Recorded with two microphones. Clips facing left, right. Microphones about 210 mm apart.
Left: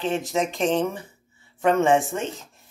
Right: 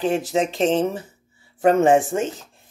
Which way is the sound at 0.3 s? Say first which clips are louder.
Right 1 dB; 30° right (ahead or behind).